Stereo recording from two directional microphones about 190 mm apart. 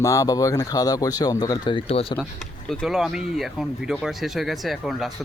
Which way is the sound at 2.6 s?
Centre (ahead or behind).